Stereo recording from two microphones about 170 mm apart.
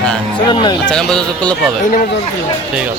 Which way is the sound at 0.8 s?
5° left (ahead or behind).